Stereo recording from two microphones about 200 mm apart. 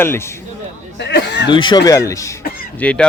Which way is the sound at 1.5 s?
25° left (ahead or behind).